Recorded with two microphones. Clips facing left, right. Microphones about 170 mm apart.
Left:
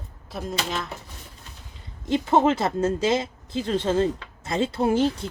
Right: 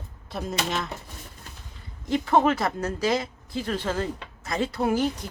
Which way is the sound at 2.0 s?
20° left (ahead or behind).